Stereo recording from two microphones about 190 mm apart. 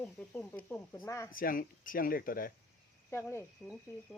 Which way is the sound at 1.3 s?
50° left (ahead or behind).